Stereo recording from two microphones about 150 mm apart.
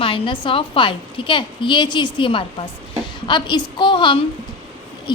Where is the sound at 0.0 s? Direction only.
35° left (ahead or behind).